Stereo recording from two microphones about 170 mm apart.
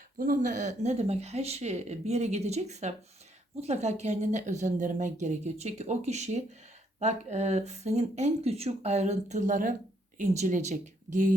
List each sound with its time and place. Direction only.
0.2 s speech: 50° right (ahead or behind)